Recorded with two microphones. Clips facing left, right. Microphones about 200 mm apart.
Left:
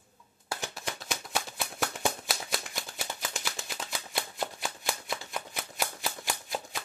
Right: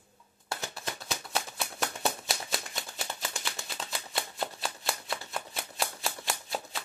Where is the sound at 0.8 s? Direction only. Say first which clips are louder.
Even; 15° left (ahead or behind).